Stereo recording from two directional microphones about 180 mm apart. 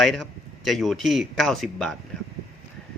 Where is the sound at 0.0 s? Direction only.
Centre (ahead or behind).